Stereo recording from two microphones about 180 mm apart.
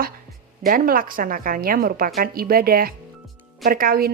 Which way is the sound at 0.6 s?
50° right (ahead or behind).